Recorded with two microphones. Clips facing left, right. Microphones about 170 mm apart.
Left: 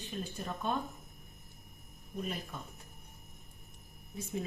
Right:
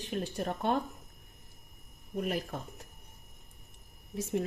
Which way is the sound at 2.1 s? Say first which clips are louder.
Right 6 dB; 70° right (ahead or behind).